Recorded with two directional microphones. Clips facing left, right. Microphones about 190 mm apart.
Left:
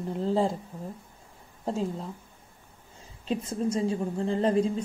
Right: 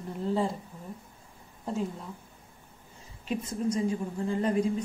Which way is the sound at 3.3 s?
30° left (ahead or behind).